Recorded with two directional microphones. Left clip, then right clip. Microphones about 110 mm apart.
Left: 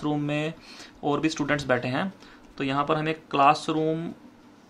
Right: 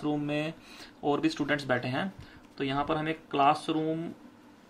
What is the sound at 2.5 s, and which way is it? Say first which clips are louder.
Speech: left 5 dB; 45° left (ahead or behind).